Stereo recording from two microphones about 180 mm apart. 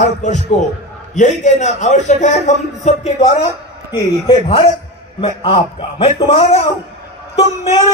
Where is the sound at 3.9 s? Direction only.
30° left (ahead or behind).